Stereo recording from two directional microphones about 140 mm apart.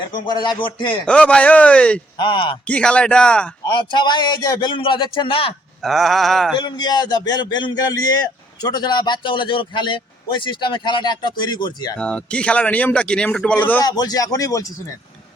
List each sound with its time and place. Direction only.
0.3 s speech: 30° left (ahead or behind)
1.0 s a man's voice: 5° left (ahead or behind)
2.1 s speech: 35° left (ahead or behind)
2.6 s a man's voice: 10° left (ahead or behind)
3.8 s speech: 35° left (ahead or behind)
5.8 s mantra: centre (ahead or behind)
6.6 s speech: 30° left (ahead or behind)
11.9 s a man's voice: 5° left (ahead or behind)
13.8 s speech: 30° left (ahead or behind)